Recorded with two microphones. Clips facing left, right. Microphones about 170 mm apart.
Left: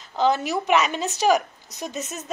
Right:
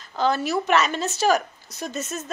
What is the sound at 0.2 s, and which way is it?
A woman's voice, 15° left (ahead or behind).